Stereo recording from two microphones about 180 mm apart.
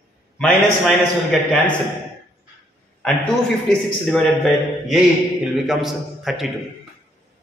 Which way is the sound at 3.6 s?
Centre (ahead or behind).